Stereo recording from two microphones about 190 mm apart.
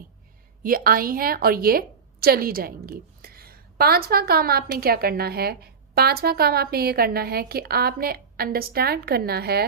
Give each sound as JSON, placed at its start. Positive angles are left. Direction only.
{"t": 0.6, "sound": "a woman's voice", "side_deg": -50}